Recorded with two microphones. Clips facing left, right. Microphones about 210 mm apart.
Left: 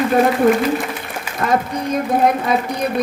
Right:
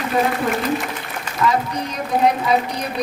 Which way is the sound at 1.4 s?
55° left (ahead or behind).